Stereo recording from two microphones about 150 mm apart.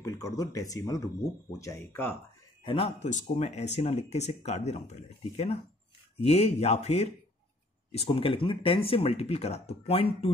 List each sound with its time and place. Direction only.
0.0 s speech: 25° left (ahead or behind)
2.6 s speech: 35° left (ahead or behind)
3.3 s speech: 45° left (ahead or behind)